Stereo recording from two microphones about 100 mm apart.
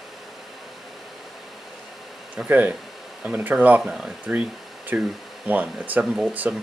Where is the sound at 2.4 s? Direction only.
15° right (ahead or behind).